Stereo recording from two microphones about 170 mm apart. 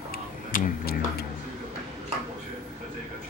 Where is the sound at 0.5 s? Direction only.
55° left (ahead or behind).